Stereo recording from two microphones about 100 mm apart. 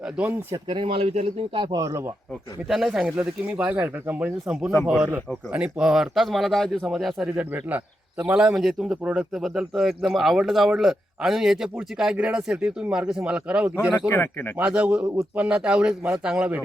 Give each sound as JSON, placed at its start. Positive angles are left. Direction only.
{"t": 0.0, "sound": "speech", "side_deg": -15}
{"t": 0.7, "sound": "speech", "side_deg": -60}
{"t": 1.7, "sound": "speech", "side_deg": -35}
{"t": 2.6, "sound": "speech", "side_deg": 0}
{"t": 8.2, "sound": "speech", "side_deg": -10}
{"t": 14.1, "sound": "speech", "side_deg": 25}
{"t": 14.5, "sound": "speech", "side_deg": -10}
{"t": 15.0, "sound": "speech", "side_deg": -30}
{"t": 15.4, "sound": "speech", "side_deg": -10}